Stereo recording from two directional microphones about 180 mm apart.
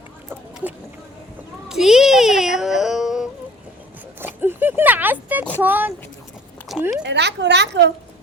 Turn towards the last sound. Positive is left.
turn(degrees=-75)  # may be behind; listen again after turning